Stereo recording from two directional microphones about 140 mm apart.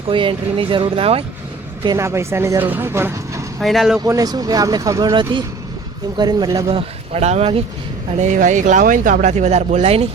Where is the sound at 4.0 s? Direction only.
25° right (ahead or behind).